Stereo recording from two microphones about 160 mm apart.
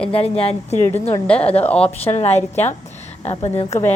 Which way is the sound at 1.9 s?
40° left (ahead or behind).